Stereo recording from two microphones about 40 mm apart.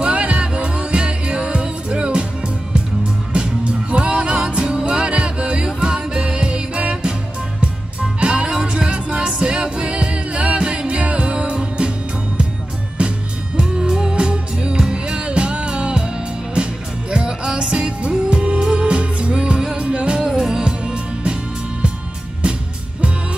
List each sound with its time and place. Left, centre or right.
0.0 s music: right
3.3 s music: right
13.6 s music: centre
17.1 s music: right
20.2 s music: centre